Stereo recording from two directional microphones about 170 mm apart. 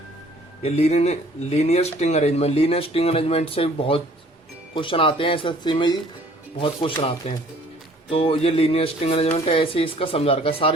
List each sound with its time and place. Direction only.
0.6 s speech: 40° left (ahead or behind)